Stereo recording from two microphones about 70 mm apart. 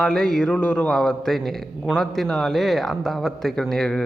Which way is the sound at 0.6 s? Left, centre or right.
Left.